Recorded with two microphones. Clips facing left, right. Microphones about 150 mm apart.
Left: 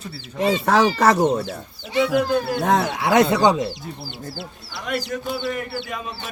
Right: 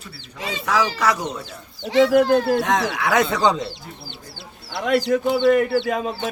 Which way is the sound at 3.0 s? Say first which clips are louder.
Left 4 dB; 25° left (ahead or behind).